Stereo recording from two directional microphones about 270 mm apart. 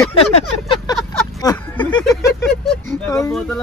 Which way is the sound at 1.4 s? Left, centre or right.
Centre.